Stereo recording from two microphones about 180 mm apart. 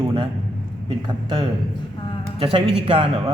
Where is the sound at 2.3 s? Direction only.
30° right (ahead or behind).